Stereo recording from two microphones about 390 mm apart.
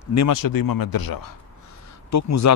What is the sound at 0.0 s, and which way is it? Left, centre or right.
A man's voice, left.